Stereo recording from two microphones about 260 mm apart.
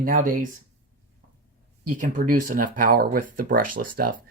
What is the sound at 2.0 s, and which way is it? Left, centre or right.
Speech, right.